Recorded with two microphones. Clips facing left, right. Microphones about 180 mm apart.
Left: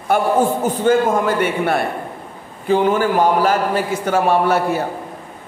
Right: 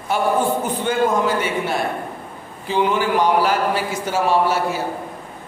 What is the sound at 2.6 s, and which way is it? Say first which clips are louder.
A man's voice: left 4 dB; 45° left (ahead or behind).